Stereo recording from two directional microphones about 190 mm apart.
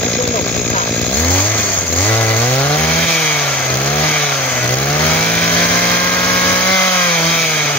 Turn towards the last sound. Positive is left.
turn(degrees=5)  # may be behind; listen again after turning